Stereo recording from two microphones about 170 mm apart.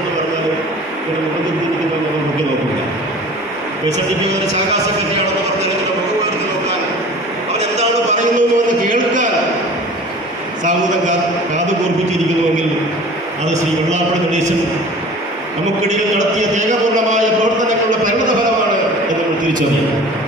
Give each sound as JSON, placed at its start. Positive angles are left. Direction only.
{"t": 7.5, "sound": "speech", "side_deg": -40}
{"t": 10.6, "sound": "a man's voice", "side_deg": -45}
{"t": 13.5, "sound": "a man's voice", "side_deg": -45}
{"t": 15.9, "sound": "a man's voice", "side_deg": -45}